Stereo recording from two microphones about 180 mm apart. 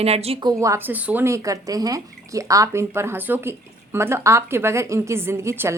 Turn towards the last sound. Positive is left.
turn(degrees=-15)  # may be behind; listen again after turning